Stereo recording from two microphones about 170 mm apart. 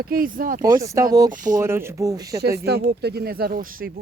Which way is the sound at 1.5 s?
15° right (ahead or behind).